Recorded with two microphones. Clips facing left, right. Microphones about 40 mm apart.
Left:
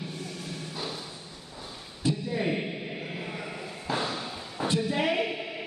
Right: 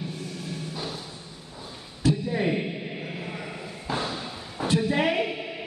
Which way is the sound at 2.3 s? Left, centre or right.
Centre.